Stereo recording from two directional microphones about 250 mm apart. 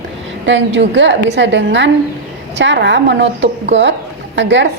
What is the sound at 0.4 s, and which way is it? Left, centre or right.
A woman's voice, right.